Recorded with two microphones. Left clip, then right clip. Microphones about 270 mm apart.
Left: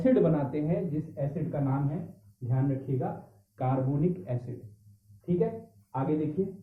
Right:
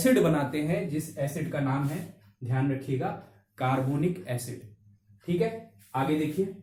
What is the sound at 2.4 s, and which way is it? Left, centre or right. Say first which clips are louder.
Speech: right 2 dB; right.